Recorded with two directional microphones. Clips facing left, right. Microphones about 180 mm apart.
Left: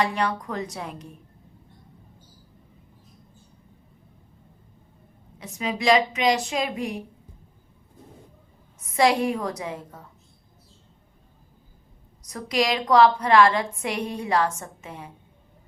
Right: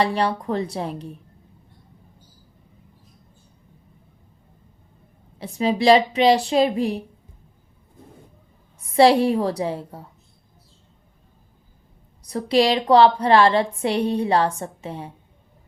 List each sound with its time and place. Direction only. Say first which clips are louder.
0.0 s a woman's voice: right 4 dB; 30° right (ahead or behind)
5.4 s a woman's voice: right 7 dB; 30° right (ahead or behind)
8.8 s a woman's voice: right 6 dB; 30° right (ahead or behind)
12.2 s a woman's voice: right 6 dB; 30° right (ahead or behind)